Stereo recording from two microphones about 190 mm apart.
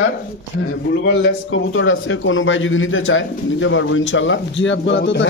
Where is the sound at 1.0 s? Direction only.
80° left.